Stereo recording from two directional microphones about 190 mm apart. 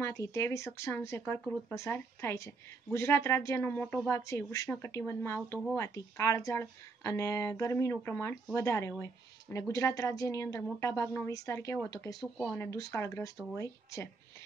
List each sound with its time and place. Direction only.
0.0 s a woman's voice: 15° left (ahead or behind)